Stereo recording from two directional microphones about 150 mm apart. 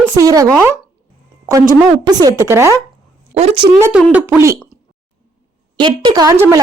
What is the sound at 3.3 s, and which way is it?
Speech, 45° right (ahead or behind).